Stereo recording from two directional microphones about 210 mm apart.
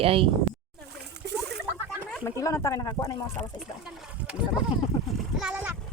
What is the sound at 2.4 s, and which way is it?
Speech, 15° left (ahead or behind).